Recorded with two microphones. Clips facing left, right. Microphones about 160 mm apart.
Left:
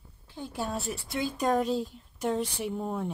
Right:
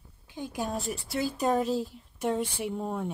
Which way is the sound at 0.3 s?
15° right (ahead or behind).